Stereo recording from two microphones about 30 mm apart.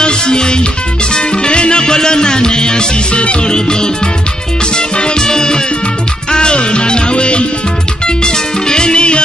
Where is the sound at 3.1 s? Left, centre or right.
Left.